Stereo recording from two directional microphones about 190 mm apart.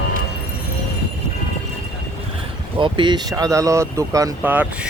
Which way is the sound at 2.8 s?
25° right (ahead or behind).